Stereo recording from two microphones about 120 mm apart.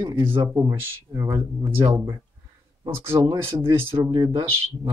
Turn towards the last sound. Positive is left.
turn(degrees=-30)  # may be behind; listen again after turning